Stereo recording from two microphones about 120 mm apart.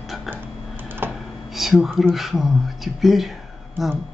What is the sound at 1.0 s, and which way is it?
Computer keyboard, 20° right (ahead or behind).